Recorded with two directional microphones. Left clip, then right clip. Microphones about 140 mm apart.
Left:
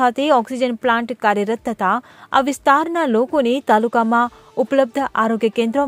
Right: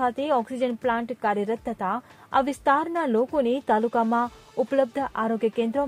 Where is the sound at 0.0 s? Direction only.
40° left (ahead or behind).